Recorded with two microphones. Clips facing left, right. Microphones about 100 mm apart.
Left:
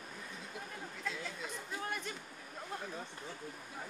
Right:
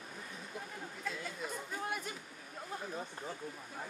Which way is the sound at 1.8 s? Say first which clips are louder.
Right 1 dB; 5° right (ahead or behind).